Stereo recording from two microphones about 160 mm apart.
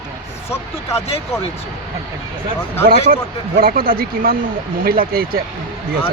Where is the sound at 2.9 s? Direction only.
65° right (ahead or behind).